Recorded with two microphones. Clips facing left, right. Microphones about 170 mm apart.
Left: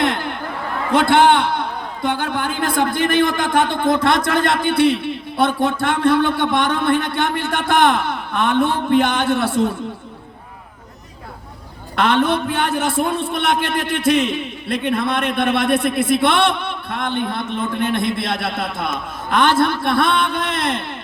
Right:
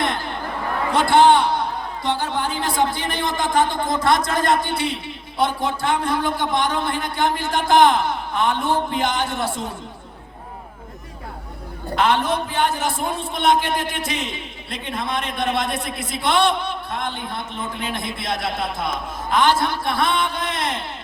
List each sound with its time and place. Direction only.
0.0 s chatter: 65° left (ahead or behind)
0.9 s a man's voice: 60° left (ahead or behind)
2.1 s a sound: 60° left (ahead or behind)
2.9 s a man's voice: 55° left (ahead or behind)
11.9 s a man's voice: 65° left (ahead or behind)